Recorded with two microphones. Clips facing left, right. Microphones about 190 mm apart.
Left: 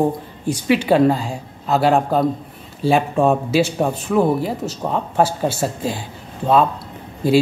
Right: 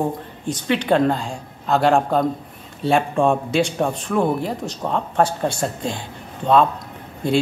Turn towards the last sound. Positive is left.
turn(degrees=5)  # may be behind; listen again after turning